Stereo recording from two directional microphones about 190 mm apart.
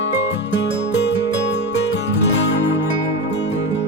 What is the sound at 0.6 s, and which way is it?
Music, 65° left (ahead or behind).